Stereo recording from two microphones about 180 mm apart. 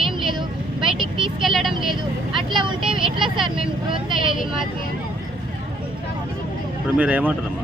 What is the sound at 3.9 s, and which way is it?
Speech, 25° right (ahead or behind).